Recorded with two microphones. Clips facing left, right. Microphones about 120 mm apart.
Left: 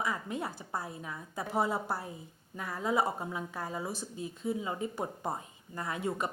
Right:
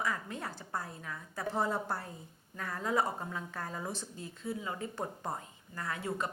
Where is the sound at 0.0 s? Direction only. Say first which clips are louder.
Left 2 dB; 15° left (ahead or behind).